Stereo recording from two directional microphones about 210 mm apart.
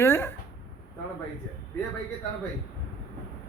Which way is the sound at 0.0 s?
10° left (ahead or behind).